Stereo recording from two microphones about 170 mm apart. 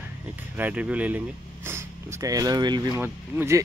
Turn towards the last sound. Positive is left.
turn(degrees=-15)  # may be behind; listen again after turning